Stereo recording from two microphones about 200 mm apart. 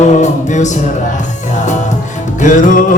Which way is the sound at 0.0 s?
35° left (ahead or behind).